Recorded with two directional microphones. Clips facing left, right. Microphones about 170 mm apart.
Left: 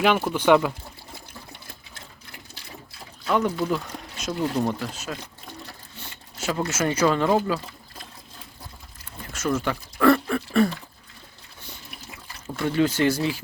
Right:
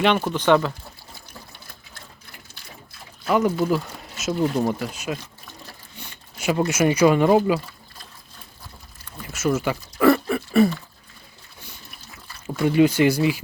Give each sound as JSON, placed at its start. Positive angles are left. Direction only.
{"t": 0.0, "sound": "speech", "side_deg": 5}
{"t": 3.2, "sound": "speech", "side_deg": -5}
{"t": 6.3, "sound": "speech", "side_deg": -15}
{"t": 9.3, "sound": "a sound", "side_deg": -5}
{"t": 12.5, "sound": "speech", "side_deg": -10}